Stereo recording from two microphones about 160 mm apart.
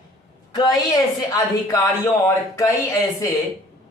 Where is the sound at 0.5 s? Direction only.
25° left (ahead or behind).